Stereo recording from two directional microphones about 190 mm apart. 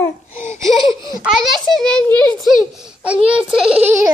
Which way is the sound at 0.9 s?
20° right (ahead or behind).